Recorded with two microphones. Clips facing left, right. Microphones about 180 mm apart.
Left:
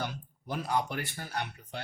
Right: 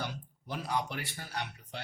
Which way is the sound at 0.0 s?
50° left (ahead or behind).